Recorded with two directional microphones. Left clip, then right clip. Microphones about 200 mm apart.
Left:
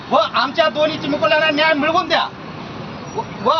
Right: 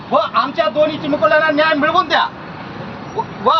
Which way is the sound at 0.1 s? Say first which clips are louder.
Right 1 dB; 5° left (ahead or behind).